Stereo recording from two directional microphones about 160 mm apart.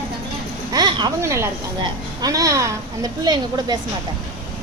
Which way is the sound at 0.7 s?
25° right (ahead or behind).